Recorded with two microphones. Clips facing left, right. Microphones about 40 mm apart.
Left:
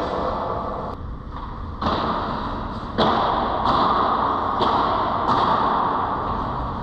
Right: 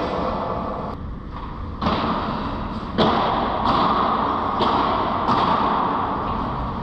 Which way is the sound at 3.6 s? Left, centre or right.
Right.